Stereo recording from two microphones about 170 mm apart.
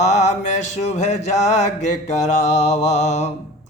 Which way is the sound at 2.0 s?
40° left (ahead or behind).